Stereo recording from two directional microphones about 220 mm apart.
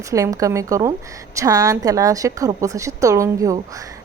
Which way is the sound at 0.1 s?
15° right (ahead or behind).